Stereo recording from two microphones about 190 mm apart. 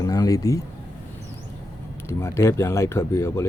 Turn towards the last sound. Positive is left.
turn(degrees=15)  # may be behind; listen again after turning